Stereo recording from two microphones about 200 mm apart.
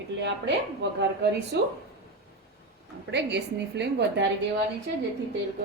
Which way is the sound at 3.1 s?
60° right (ahead or behind).